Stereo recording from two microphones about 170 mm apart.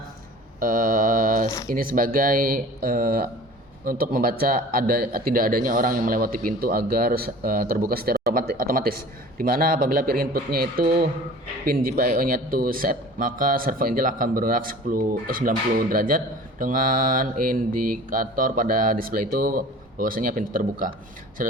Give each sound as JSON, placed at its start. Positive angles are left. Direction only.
{"t": 0.6, "sound": "mantra", "side_deg": -55}
{"t": 1.6, "sound": "a man's voice", "side_deg": -55}